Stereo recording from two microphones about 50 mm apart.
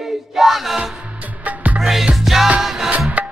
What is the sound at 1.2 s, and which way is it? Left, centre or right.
Music, right.